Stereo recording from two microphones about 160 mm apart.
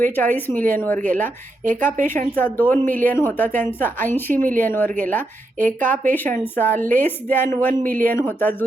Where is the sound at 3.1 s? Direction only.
15° left (ahead or behind).